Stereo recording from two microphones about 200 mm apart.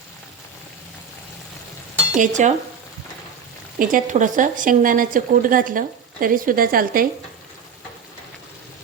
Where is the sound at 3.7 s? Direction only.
45° right (ahead or behind).